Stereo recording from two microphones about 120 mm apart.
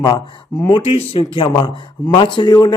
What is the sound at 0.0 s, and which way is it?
Speech, 40° left (ahead or behind).